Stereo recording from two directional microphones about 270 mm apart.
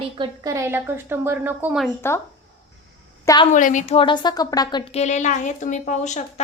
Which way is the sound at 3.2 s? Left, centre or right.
Centre.